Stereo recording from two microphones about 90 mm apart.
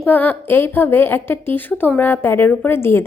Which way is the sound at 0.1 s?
20° left (ahead or behind).